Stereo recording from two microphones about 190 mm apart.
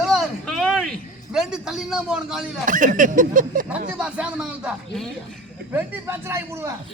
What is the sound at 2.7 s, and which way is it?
Speech, 45° right (ahead or behind).